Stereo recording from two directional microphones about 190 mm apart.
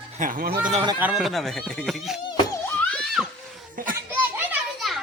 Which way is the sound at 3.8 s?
45° right (ahead or behind).